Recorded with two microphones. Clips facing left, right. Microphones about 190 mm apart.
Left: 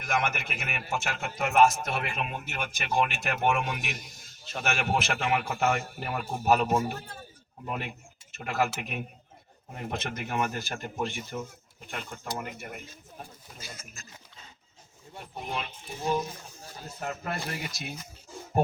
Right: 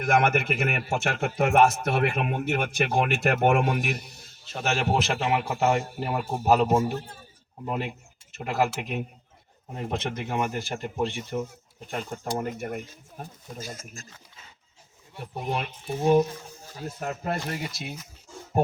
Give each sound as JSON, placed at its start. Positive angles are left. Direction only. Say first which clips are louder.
{"t": 0.0, "sound": "a man's voice", "louder": "right 8 dB", "side_deg": -55}
{"t": 4.6, "sound": "a man's voice", "louder": "right 4 dB", "side_deg": -30}
{"t": 15.5, "sound": "a man's voice", "louder": "right 6 dB", "side_deg": -55}
{"t": 17.0, "sound": "speech", "louder": "right 3 dB", "side_deg": -35}